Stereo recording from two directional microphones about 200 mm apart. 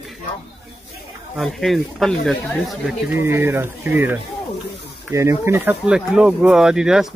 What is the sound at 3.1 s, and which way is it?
Speech, 10° right (ahead or behind).